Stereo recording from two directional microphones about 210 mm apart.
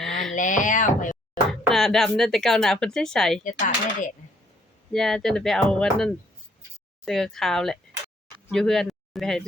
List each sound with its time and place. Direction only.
0.0 s wail: centre (ahead or behind)
0.3 s speech: 35° left (ahead or behind)
1.7 s speech: centre (ahead or behind)
3.4 s speech: 40° left (ahead or behind)
4.9 s speech: centre (ahead or behind)